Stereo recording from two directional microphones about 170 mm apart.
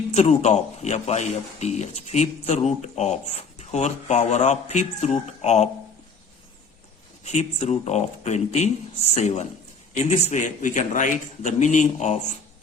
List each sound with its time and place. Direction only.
0.1 s a man's voice: 40° left (ahead or behind)
7.3 s a man's voice: 40° left (ahead or behind)